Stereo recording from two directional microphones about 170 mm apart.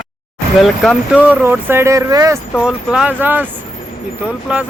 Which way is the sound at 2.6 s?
5° right (ahead or behind).